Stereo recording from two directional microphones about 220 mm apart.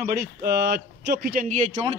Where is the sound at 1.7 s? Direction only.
25° right (ahead or behind).